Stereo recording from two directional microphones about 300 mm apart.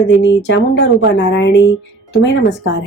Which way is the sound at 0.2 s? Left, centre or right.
Left.